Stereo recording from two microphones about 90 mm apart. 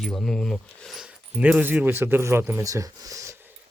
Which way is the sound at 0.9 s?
15° right (ahead or behind).